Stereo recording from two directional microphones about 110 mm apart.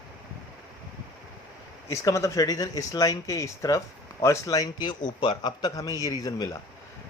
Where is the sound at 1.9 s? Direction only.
30° left (ahead or behind).